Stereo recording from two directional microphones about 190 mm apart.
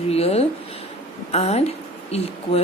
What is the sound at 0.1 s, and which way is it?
A woman's voice, 30° left (ahead or behind).